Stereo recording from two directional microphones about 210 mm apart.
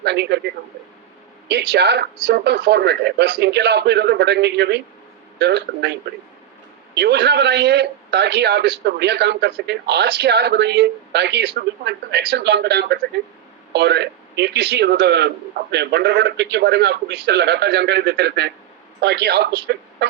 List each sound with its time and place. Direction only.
0.0 s a man's voice: 55° right (ahead or behind)
1.5 s a man's voice: 55° right (ahead or behind)